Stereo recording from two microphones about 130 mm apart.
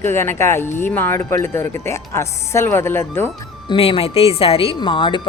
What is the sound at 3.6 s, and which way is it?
Speech, 45° left (ahead or behind).